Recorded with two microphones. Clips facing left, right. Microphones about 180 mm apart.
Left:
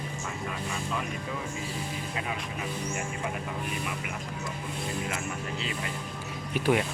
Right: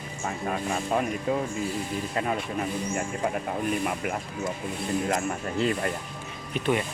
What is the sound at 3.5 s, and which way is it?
Speech, 50° right (ahead or behind).